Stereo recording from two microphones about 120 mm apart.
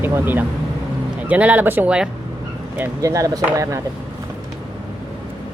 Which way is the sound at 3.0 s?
25° right (ahead or behind).